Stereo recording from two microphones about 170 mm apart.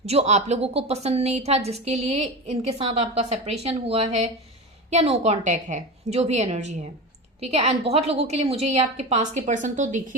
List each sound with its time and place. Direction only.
0.0 s a woman's voice: 40° right (ahead or behind)